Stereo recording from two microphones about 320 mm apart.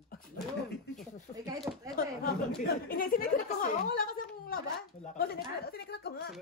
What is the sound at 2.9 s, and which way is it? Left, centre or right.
A woman's voice, left.